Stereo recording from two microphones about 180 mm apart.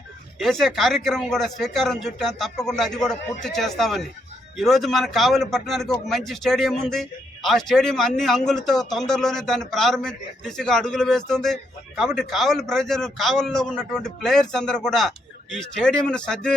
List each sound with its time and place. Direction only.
0.3 s a man's voice: centre (ahead or behind)